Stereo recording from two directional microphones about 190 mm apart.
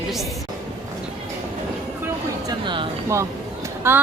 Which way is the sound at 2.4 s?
25° right (ahead or behind).